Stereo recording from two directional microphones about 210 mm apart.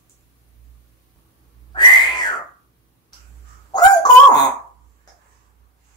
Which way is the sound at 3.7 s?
20° left (ahead or behind).